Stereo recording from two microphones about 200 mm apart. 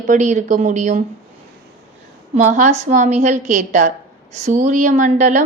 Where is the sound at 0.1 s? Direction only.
40° right (ahead or behind).